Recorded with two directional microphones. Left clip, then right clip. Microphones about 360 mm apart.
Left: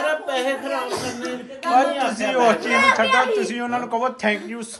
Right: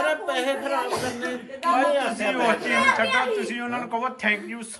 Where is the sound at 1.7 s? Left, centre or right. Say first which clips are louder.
Left 4 dB; centre.